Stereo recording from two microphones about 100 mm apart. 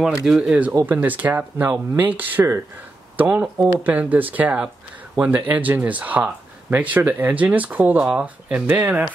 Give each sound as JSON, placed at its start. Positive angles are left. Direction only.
{"t": 0.0, "sound": "speech", "side_deg": -5}